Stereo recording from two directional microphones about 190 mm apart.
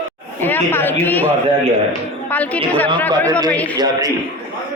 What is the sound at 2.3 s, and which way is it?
Speech, 10° left (ahead or behind).